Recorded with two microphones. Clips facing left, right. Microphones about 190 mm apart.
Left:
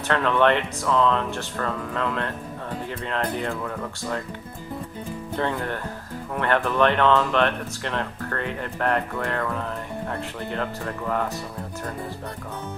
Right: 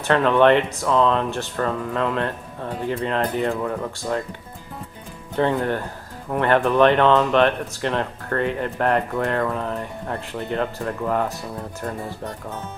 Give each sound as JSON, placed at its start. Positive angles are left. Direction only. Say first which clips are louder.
{"t": 0.1, "sound": "speech", "louder": "right 5 dB", "side_deg": -25}
{"t": 5.4, "sound": "speech", "louder": "right 7 dB", "side_deg": -20}